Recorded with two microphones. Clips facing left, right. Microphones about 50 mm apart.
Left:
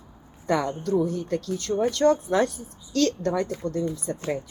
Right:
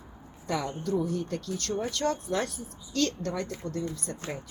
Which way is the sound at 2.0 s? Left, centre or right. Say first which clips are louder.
Left 11 dB; left.